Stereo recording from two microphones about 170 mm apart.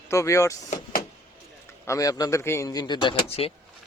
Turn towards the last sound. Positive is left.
turn(degrees=30)  # may be behind; listen again after turning